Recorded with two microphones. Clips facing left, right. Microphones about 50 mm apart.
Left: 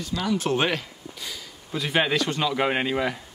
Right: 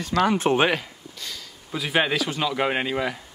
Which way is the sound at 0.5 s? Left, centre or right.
Centre.